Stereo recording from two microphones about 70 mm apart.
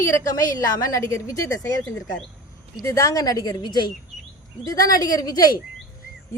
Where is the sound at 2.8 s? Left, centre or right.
Left.